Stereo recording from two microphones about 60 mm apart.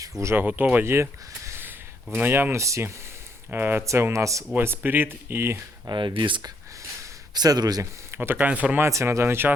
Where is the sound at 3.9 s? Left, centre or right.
Right.